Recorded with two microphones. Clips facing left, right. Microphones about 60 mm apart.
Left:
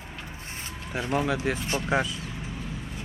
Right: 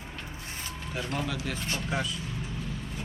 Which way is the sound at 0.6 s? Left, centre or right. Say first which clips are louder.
Left 3 dB; left.